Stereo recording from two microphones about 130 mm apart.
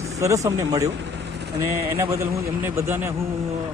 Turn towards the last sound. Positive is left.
turn(degrees=-20)  # may be behind; listen again after turning